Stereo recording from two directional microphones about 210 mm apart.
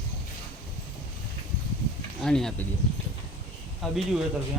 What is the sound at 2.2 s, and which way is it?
Speech, centre (ahead or behind).